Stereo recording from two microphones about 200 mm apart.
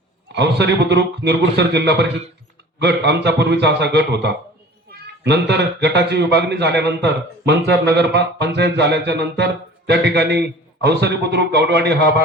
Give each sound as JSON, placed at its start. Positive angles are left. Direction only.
{"t": 0.3, "sound": "speech", "side_deg": -60}